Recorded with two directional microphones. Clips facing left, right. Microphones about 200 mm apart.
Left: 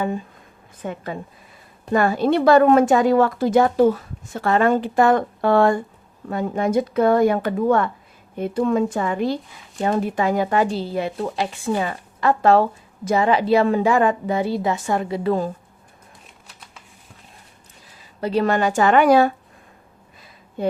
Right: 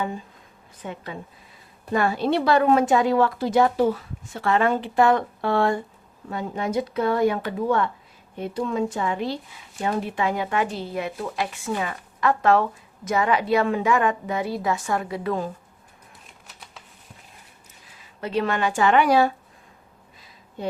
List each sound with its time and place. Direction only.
0.8 s a woman's voice: 50° left (ahead or behind); by 15.4 s 30° left (ahead or behind)
18.2 s a woman's voice: 35° left (ahead or behind)